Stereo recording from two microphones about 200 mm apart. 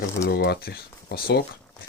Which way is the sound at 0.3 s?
55° left (ahead or behind).